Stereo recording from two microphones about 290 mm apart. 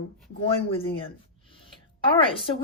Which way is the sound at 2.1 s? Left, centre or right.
Centre.